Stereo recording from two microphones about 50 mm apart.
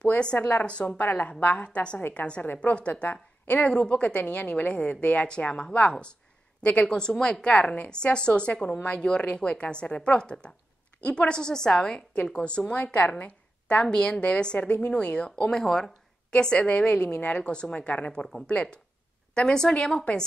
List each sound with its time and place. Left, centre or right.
0.4 s a woman's voice: left
0.9 s a woman's voice: left
2.4 s a woman's voice: left
6.9 s a woman's voice: centre
16.3 s a woman's voice: centre
18.2 s a woman's voice: centre